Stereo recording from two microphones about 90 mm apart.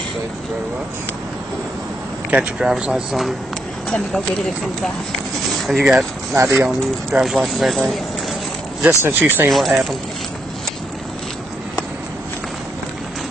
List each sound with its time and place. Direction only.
2.3 s speech: 10° right (ahead or behind)
3.9 s speech: 5° left (ahead or behind)
5.7 s speech: centre (ahead or behind)
6.3 s speech: 35° right (ahead or behind)
7.2 s speech: centre (ahead or behind)
8.8 s speech: 25° right (ahead or behind)
9.5 s speech: centre (ahead or behind)